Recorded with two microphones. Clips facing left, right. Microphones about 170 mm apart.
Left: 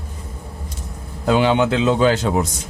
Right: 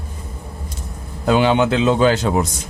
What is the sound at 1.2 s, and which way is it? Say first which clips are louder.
A man's voice: right 1 dB; 60° right (ahead or behind).